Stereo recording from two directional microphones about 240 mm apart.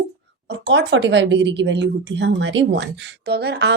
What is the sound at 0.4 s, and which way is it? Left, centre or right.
Speech, right.